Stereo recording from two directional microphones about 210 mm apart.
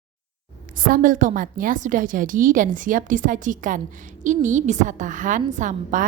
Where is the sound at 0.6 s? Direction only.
40° right (ahead or behind).